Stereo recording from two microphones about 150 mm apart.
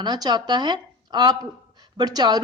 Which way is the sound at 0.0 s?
30° right (ahead or behind).